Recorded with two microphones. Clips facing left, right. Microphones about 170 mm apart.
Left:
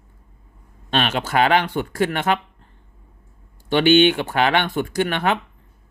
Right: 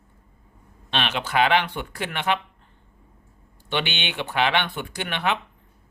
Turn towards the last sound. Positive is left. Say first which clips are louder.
# left 6 dB
turn(degrees=45)  # may be behind; listen again after turning